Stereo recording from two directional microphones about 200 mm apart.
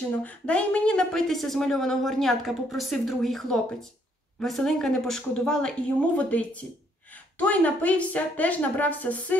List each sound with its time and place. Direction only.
0.2 s a woman's voice: 5° left (ahead or behind)